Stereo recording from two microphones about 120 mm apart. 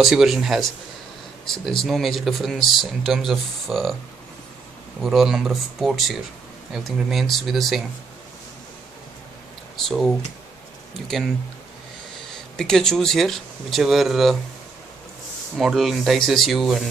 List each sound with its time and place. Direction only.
0.0 s speech: centre (ahead or behind)
5.0 s speech: centre (ahead or behind)
12.5 s speech: 5° left (ahead or behind)
15.5 s speech: centre (ahead or behind)